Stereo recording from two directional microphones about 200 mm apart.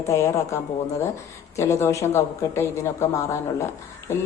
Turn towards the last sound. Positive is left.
turn(degrees=15)  # may be behind; listen again after turning